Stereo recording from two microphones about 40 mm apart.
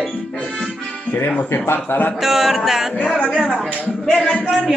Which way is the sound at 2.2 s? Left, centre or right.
Centre.